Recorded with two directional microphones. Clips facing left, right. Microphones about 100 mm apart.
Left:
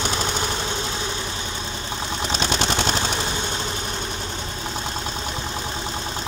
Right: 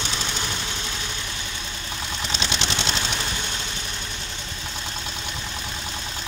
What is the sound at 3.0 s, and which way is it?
Vehicle, 30° left (ahead or behind).